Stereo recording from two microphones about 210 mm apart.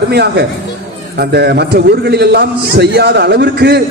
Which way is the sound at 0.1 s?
50° right (ahead or behind).